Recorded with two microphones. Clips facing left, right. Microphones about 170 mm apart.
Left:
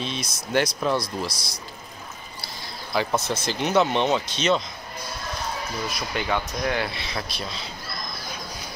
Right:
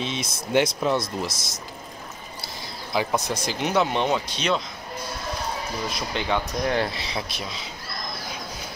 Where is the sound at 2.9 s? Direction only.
15° right (ahead or behind).